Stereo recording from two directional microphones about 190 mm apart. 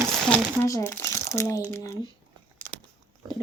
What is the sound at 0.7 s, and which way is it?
Speech, 15° left (ahead or behind).